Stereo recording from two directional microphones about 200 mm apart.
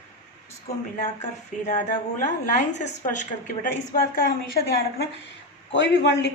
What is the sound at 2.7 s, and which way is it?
A woman's voice, 40° left (ahead or behind).